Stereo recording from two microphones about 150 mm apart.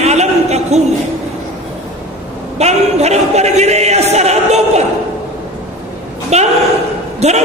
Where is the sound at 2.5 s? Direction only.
45° right (ahead or behind).